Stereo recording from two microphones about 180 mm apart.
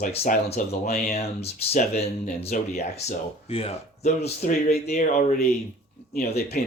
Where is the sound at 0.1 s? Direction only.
40° left (ahead or behind).